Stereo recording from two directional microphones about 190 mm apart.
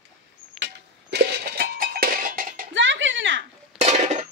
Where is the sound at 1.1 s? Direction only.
55° right (ahead or behind).